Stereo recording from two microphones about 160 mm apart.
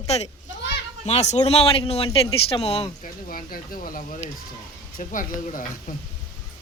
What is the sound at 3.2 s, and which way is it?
Speech, 65° left (ahead or behind).